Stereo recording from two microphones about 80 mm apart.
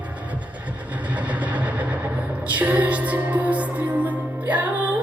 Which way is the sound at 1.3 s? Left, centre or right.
Centre.